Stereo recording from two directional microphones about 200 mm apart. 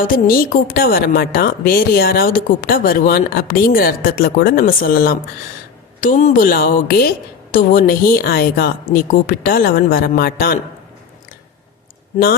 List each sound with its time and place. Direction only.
0.0 s a woman's voice: 45° left (ahead or behind)